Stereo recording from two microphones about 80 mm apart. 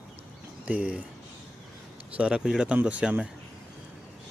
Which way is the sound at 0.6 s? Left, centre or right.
Centre.